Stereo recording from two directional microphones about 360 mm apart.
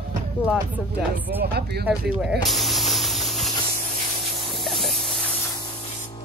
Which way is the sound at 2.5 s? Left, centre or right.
Centre.